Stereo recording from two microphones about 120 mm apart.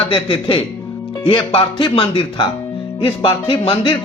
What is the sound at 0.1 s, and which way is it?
Speech, 45° left (ahead or behind).